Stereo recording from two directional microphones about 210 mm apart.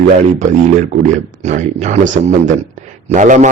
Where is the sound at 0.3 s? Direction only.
35° right (ahead or behind).